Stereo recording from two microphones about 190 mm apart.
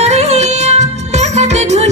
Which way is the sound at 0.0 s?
35° right (ahead or behind).